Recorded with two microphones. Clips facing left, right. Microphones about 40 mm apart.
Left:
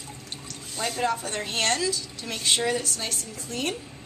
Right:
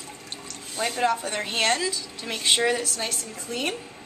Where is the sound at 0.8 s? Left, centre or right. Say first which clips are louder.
Right 3 dB; centre.